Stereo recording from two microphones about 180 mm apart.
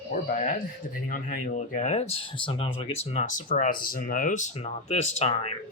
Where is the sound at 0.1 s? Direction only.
45° left (ahead or behind).